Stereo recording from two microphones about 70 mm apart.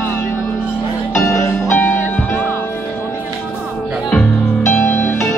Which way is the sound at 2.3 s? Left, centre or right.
Left.